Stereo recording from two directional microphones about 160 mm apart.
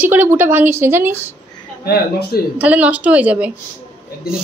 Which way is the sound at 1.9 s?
80° left.